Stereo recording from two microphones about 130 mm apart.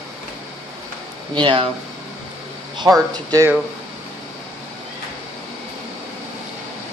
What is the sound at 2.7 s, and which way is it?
Speech, 30° right (ahead or behind).